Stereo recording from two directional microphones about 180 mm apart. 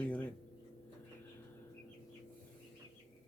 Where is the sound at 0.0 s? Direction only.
10° left (ahead or behind).